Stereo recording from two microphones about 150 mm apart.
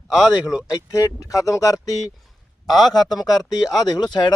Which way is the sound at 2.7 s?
Centre (ahead or behind).